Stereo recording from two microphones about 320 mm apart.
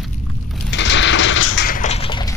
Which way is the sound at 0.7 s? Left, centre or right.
Left.